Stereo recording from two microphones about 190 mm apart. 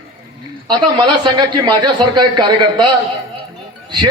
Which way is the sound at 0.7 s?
25° right (ahead or behind).